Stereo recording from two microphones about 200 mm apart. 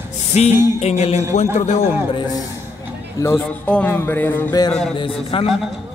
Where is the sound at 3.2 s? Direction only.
10° left (ahead or behind).